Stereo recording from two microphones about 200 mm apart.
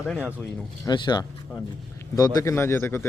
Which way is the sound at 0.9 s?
20° left (ahead or behind).